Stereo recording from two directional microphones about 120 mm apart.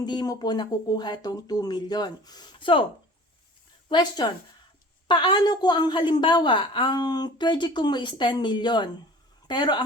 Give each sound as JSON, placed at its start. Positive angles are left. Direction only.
{"t": 0.0, "sound": "a woman's voice", "side_deg": 35}
{"t": 3.8, "sound": "a woman's voice", "side_deg": 40}